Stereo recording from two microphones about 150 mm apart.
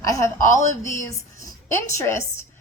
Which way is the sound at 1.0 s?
20° left (ahead or behind).